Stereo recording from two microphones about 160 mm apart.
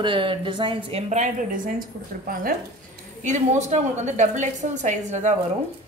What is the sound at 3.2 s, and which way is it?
A woman's voice, 50° right (ahead or behind).